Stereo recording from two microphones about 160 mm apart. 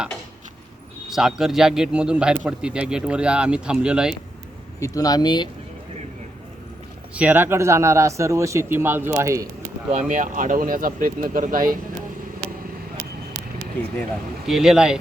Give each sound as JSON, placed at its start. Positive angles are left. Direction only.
{"t": 1.1, "sound": "speech", "side_deg": -5}
{"t": 4.8, "sound": "speech", "side_deg": 25}
{"t": 7.1, "sound": "speech", "side_deg": -10}
{"t": 10.1, "sound": "speech", "side_deg": -55}
{"t": 14.4, "sound": "speech", "side_deg": -5}